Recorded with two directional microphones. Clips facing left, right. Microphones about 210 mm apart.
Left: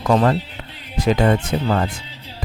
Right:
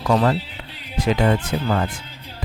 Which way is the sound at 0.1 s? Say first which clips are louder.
Left 2 dB; 50° left (ahead or behind).